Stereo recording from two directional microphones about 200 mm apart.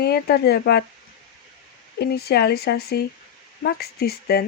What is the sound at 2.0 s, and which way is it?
Speech, 55° left (ahead or behind).